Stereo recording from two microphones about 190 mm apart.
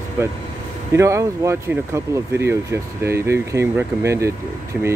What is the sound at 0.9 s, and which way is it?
Speech, 15° right (ahead or behind).